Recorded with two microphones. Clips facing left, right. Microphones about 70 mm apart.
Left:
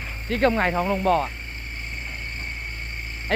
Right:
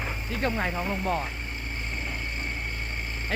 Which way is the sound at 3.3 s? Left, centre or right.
Left.